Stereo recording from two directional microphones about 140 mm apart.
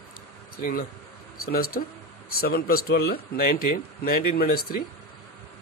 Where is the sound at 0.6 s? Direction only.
90° left.